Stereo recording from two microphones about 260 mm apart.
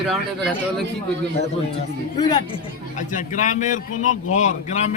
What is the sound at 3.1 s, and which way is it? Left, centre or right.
A man's voice, left.